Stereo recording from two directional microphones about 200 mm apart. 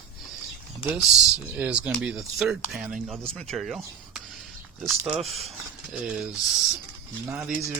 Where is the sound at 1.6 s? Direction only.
5° right (ahead or behind).